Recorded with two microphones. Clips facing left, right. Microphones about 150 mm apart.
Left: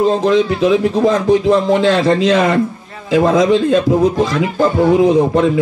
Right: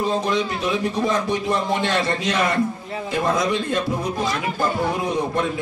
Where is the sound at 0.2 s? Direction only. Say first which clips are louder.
Left 10 dB; 90° left.